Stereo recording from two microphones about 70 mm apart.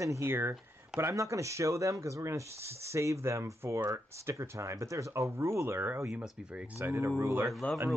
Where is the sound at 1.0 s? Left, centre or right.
Right.